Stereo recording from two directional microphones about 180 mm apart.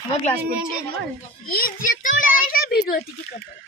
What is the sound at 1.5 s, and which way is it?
A child's voice, 50° left (ahead or behind).